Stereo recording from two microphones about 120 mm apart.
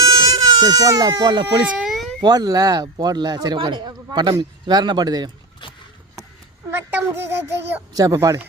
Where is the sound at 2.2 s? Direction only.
35° right (ahead or behind).